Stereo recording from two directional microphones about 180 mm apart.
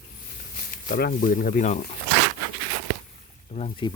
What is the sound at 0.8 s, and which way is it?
Speech, 50° left (ahead or behind).